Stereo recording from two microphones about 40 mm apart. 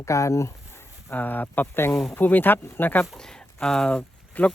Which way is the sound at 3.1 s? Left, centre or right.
Centre.